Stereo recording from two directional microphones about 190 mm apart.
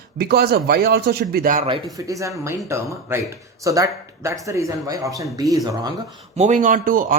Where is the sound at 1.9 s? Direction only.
15° right (ahead or behind).